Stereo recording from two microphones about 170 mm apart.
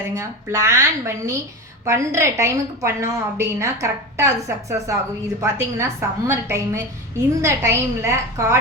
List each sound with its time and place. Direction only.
0.1 s a woman's voice: 15° right (ahead or behind)